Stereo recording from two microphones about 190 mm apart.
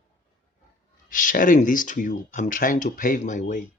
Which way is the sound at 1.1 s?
45° left (ahead or behind).